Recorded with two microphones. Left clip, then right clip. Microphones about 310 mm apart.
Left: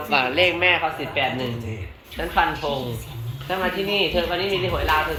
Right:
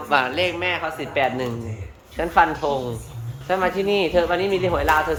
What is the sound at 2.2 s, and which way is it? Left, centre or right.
A woman's voice, centre.